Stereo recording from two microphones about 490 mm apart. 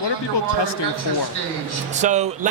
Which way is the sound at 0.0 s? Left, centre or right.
Left.